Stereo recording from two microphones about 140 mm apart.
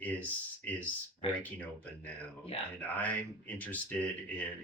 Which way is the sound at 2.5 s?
40° left (ahead or behind).